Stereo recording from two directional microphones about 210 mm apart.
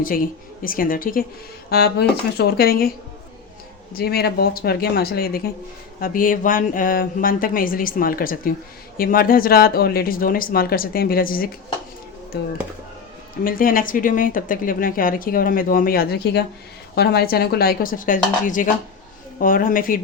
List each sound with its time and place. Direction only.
0.0 s speech: 40° left (ahead or behind)
3.9 s speech: 50° left (ahead or behind)